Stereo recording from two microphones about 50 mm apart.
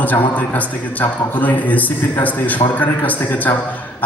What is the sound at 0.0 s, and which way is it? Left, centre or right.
A man's voice, left.